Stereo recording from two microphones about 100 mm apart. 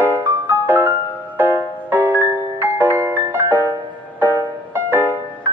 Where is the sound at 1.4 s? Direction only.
20° right (ahead or behind).